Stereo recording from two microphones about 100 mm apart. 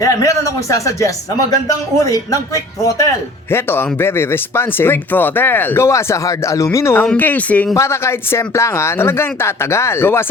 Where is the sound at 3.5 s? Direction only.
25° left (ahead or behind).